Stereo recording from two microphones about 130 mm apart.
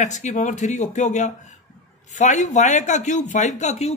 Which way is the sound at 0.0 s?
65° left (ahead or behind).